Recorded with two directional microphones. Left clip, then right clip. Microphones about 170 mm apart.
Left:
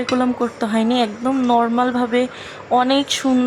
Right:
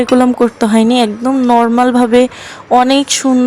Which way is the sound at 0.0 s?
40° right (ahead or behind).